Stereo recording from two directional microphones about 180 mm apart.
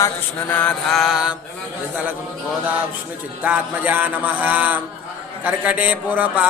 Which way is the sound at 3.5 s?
10° right (ahead or behind).